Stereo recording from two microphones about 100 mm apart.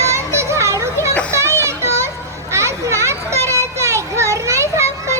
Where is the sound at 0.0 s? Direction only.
30° right (ahead or behind).